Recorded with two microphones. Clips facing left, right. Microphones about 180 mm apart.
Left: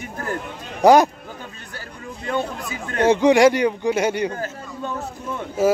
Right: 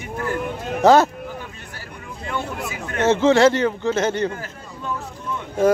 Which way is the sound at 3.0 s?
15° left (ahead or behind).